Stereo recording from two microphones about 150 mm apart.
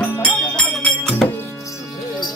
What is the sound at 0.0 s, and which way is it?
Music, 10° left (ahead or behind).